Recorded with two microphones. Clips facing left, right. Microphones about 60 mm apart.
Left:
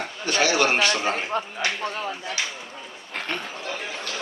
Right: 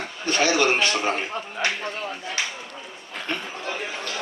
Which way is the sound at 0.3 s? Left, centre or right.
Right.